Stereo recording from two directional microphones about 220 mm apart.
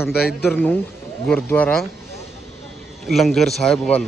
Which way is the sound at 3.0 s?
Centre (ahead or behind).